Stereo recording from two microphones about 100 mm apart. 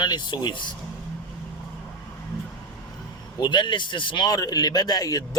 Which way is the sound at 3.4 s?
50° left (ahead or behind).